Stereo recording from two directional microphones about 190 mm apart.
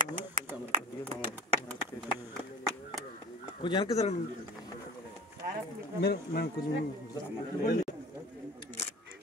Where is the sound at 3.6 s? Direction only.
25° left (ahead or behind).